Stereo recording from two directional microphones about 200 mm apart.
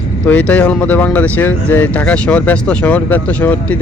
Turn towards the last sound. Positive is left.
turn(degrees=10)  # may be behind; listen again after turning